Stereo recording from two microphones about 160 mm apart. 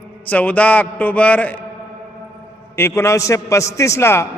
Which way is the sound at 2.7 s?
15° left (ahead or behind).